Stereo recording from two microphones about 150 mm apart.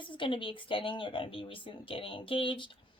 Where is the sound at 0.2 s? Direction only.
35° left (ahead or behind).